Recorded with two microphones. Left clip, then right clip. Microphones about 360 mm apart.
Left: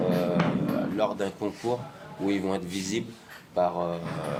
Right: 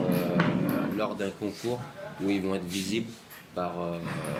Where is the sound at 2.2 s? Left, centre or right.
Centre.